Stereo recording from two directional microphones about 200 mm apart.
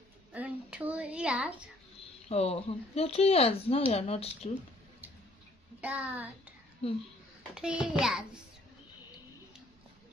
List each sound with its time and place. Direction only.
0.3 s a sound: 5° right (ahead or behind)
2.2 s speech: 30° left (ahead or behind)
5.8 s a child's voice: 5° right (ahead or behind)
7.5 s a child's voice: 5° right (ahead or behind)